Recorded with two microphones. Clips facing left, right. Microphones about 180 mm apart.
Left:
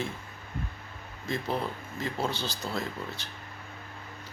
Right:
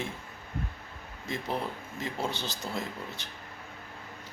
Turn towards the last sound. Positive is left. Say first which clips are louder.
# left 2 dB
turn(degrees=-20)  # may be behind; listen again after turning